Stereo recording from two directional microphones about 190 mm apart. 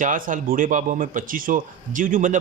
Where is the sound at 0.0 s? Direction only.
45° right (ahead or behind).